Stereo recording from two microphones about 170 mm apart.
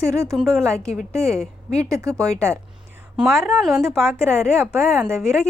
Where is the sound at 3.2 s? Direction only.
5° right (ahead or behind).